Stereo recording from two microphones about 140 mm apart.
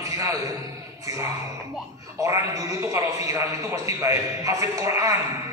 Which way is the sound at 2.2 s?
25° right (ahead or behind).